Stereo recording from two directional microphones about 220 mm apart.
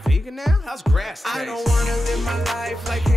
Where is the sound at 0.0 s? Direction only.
Centre (ahead or behind).